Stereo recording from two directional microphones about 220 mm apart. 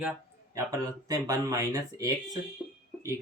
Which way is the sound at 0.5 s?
15° right (ahead or behind).